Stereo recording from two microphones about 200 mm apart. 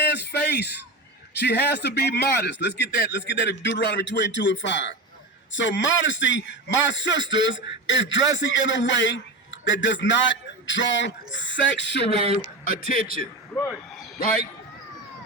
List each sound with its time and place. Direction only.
0.1 s a sound: 55° left (ahead or behind)
1.4 s speech: 55° left (ahead or behind)
12.6 s speech: 45° left (ahead or behind)
13.5 s speech: 5° left (ahead or behind)